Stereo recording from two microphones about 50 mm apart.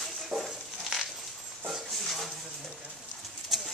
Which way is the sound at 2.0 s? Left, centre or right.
Centre.